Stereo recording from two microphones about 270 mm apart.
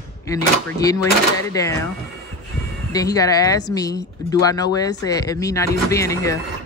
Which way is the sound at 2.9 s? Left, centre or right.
Centre.